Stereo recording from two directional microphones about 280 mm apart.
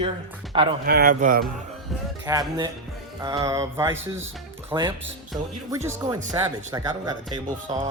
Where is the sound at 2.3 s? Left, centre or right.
Centre.